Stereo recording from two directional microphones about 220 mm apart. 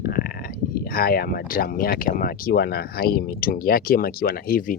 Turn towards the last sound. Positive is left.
turn(degrees=40)  # may be behind; listen again after turning